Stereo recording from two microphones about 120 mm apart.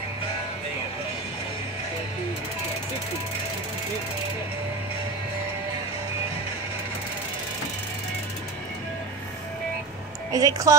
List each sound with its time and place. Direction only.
10.3 s speech: 30° right (ahead or behind)